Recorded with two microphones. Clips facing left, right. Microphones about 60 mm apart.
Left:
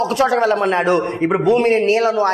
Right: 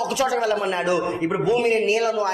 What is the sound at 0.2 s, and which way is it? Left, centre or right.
A man's voice, left.